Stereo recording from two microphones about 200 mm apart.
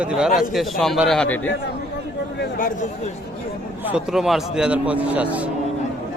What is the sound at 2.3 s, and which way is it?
Speech, 45° left (ahead or behind).